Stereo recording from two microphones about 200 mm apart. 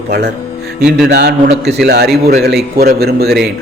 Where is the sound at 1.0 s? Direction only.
55° right (ahead or behind).